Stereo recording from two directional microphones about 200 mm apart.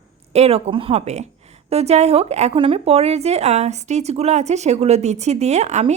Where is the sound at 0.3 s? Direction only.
30° right (ahead or behind).